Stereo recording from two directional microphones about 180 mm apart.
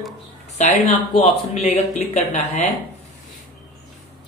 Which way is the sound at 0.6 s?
35° left (ahead or behind).